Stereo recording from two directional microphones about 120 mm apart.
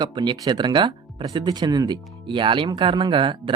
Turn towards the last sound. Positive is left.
turn(degrees=-45)  # may be behind; listen again after turning